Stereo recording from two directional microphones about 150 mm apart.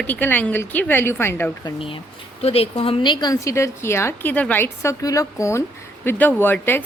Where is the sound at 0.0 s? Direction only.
10° left (ahead or behind).